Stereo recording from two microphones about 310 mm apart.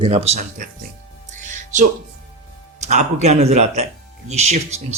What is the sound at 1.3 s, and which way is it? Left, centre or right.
Music, right.